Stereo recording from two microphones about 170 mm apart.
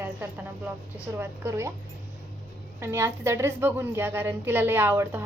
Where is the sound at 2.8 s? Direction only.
15° right (ahead or behind).